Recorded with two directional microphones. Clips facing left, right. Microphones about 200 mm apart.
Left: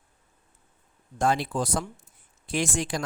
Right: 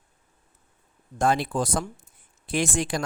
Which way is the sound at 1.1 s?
55° right (ahead or behind).